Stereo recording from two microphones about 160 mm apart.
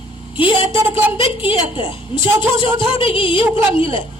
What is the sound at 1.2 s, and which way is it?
Speech, 35° left (ahead or behind).